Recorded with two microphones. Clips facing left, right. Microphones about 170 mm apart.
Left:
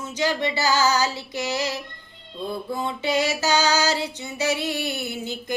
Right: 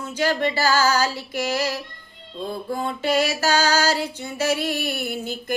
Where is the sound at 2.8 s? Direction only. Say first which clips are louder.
Right 2 dB; 20° left (ahead or behind).